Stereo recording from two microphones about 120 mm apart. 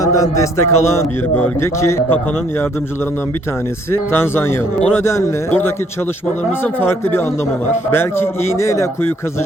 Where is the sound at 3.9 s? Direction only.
20° left (ahead or behind).